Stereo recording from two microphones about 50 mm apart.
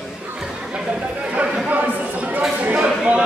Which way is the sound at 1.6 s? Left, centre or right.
Right.